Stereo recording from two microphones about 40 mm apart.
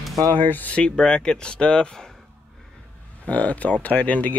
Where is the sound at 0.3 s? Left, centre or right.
Left.